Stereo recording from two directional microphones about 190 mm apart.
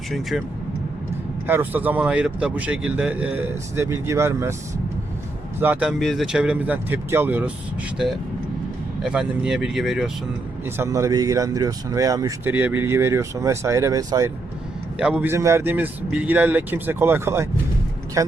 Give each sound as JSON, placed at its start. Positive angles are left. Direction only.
{"t": 0.1, "sound": "speech", "side_deg": 0}
{"t": 1.5, "sound": "speech", "side_deg": -10}
{"t": 5.5, "sound": "speech", "side_deg": -10}
{"t": 9.0, "sound": "speech", "side_deg": -5}
{"t": 10.8, "sound": "speech", "side_deg": -15}
{"t": 14.9, "sound": "speech", "side_deg": -5}